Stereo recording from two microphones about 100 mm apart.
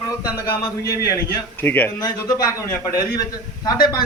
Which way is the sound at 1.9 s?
35° left (ahead or behind).